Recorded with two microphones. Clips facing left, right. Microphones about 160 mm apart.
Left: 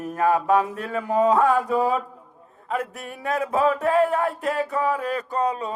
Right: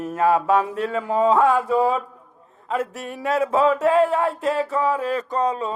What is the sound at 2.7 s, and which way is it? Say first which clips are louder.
Mantra: right 3 dB; 30° right (ahead or behind).